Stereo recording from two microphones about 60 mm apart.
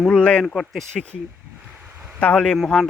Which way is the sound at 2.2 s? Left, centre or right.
Centre.